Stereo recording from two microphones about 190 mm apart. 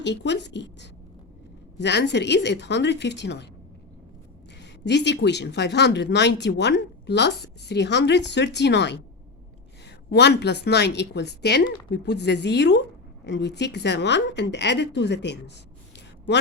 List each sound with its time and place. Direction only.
0.0 s a woman's voice: 65° left (ahead or behind)
4.6 s speech: 65° left (ahead or behind)
10.1 s speech: 65° left (ahead or behind)